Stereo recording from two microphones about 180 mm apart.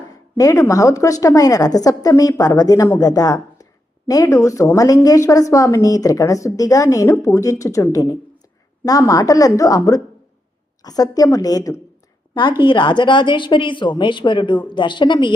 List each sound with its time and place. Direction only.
0.3 s a woman's voice: 20° left (ahead or behind)